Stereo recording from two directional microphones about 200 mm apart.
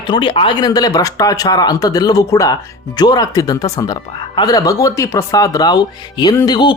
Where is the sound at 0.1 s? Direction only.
25° left (ahead or behind).